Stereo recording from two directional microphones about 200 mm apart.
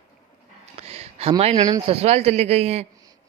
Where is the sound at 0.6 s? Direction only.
30° right (ahead or behind).